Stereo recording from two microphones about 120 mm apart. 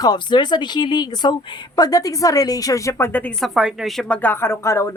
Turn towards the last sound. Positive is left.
turn(degrees=25)  # may be behind; listen again after turning